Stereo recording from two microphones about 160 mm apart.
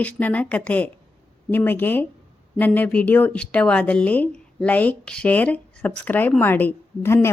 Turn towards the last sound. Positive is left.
turn(degrees=15)  # may be behind; listen again after turning